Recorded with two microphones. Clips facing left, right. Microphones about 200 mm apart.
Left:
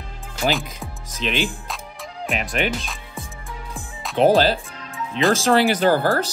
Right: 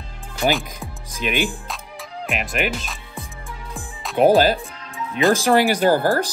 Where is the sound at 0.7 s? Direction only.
15° right (ahead or behind).